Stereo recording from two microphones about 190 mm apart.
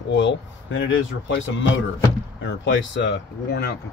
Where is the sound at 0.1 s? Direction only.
70° left (ahead or behind).